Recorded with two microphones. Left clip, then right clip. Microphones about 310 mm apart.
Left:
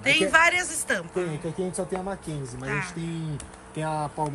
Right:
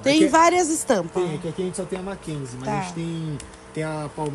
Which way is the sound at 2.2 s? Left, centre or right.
Centre.